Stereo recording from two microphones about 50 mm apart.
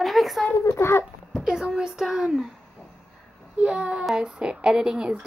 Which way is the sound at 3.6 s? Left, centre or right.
Centre.